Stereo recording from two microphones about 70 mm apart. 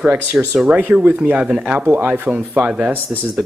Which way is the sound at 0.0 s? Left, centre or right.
Right.